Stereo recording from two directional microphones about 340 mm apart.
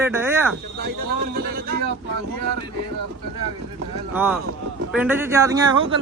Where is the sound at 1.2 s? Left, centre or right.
Right.